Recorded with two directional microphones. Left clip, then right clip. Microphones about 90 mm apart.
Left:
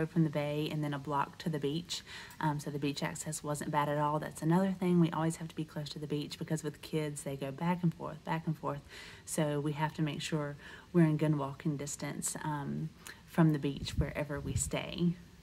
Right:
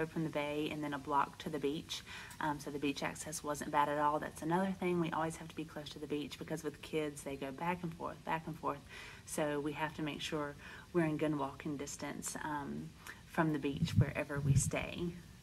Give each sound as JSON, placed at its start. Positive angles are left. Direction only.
{"t": 0.0, "sound": "speech", "side_deg": 30}